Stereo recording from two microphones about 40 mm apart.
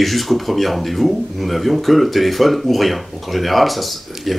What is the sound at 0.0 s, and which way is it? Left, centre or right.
Speech, centre.